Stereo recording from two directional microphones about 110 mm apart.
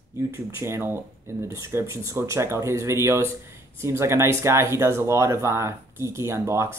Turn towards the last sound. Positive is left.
turn(degrees=-25)  # may be behind; listen again after turning